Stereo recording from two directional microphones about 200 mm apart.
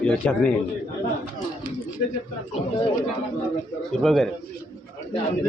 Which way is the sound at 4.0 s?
Centre (ahead or behind).